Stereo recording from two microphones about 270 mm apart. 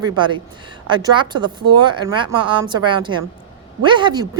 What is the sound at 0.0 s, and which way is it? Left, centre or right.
A woman's voice, centre.